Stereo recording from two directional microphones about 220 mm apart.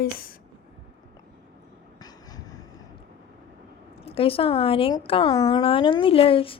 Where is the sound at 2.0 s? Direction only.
15° left (ahead or behind).